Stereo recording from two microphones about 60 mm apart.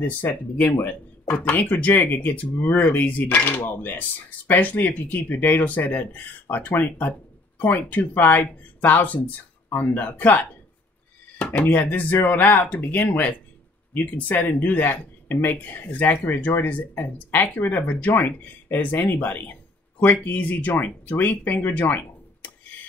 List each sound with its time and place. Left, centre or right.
0.2 s speech: left